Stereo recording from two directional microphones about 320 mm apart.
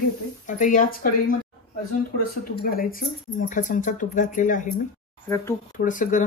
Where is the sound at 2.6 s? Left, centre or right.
Left.